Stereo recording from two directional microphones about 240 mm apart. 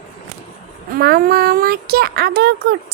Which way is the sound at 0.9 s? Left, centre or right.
Right.